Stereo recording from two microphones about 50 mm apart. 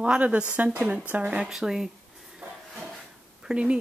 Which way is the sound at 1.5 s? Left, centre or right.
Centre.